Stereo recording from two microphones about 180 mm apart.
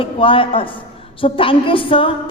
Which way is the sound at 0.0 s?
30° left (ahead or behind).